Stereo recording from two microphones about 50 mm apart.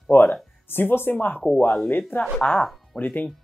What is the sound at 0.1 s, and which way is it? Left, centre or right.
Speech, left.